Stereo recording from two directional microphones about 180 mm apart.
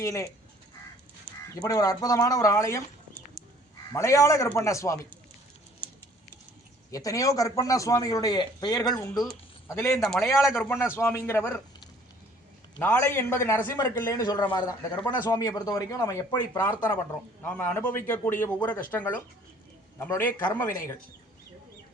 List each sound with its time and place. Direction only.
0.0 s a man's voice: 15° left (ahead or behind)
1.5 s a man's voice: 20° left (ahead or behind)
6.9 s a man's voice: 20° left (ahead or behind)
10.0 s a man's voice: centre (ahead or behind)
10.8 s a man's voice: 15° left (ahead or behind)
12.8 s a man's voice: 10° left (ahead or behind)
17.4 s a man's voice: 10° left (ahead or behind)